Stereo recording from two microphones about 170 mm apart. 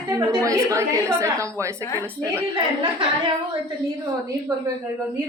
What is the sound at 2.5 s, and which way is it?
Speech, 30° right (ahead or behind).